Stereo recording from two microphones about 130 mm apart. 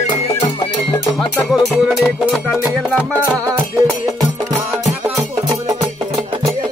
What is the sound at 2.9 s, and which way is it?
Music, 15° left (ahead or behind).